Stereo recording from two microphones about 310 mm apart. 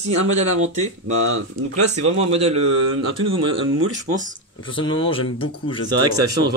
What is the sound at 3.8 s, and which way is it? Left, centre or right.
Speech, right.